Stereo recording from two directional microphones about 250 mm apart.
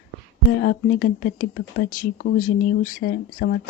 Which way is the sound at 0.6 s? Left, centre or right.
Left.